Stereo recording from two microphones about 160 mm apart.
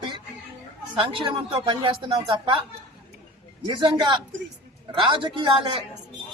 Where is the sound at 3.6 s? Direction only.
30° right (ahead or behind).